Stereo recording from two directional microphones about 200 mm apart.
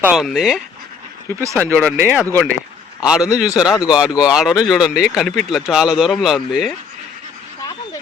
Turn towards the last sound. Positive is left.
turn(degrees=20)  # may be behind; listen again after turning